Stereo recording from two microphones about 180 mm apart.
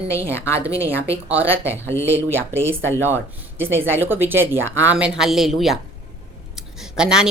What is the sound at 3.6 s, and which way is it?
Speech, 10° right (ahead or behind).